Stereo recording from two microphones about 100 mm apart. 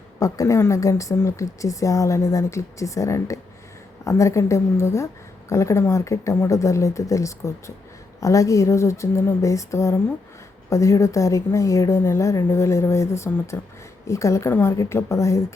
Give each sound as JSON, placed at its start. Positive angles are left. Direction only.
{"t": 0.2, "sound": "a woman's voice", "side_deg": 35}